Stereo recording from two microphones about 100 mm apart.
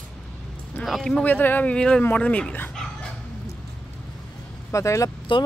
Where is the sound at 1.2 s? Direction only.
20° left (ahead or behind).